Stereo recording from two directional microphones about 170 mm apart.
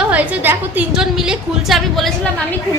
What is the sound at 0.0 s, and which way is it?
A woman's voice, 10° right (ahead or behind).